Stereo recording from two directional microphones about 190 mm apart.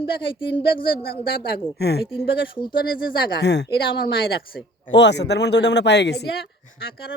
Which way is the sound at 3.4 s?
65° left (ahead or behind).